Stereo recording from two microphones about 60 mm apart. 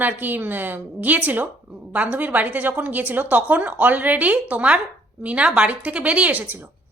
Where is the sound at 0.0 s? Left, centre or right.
Right.